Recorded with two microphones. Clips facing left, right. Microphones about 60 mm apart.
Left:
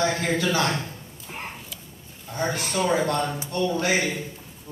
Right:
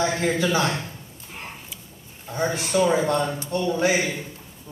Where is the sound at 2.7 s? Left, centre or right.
Centre.